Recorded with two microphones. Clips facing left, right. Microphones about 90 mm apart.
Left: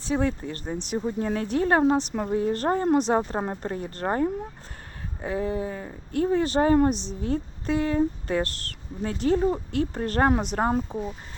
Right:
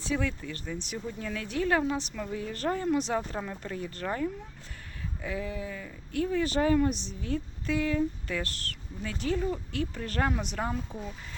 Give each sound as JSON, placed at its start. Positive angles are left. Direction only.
{"t": 0.0, "sound": "speech", "side_deg": 35}